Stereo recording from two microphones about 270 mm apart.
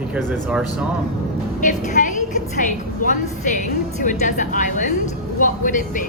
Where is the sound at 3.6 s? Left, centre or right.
Left.